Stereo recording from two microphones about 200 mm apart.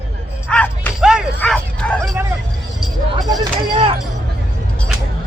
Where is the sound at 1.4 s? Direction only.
5° left (ahead or behind).